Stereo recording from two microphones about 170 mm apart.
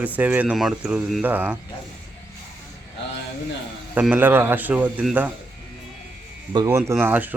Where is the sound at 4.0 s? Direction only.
10° right (ahead or behind).